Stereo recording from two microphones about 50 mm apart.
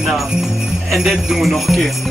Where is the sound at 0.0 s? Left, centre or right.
Centre.